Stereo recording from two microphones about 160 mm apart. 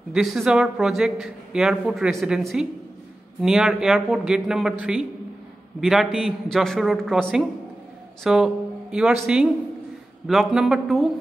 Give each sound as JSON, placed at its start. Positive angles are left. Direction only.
{"t": 0.1, "sound": "a man's voice", "side_deg": 0}